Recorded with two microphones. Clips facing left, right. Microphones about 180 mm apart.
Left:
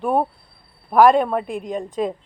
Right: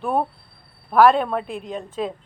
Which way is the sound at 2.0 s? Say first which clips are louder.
Left 3 dB; 5° left (ahead or behind).